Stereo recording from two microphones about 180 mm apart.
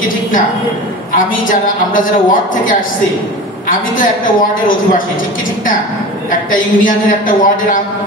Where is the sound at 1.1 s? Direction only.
50° left (ahead or behind).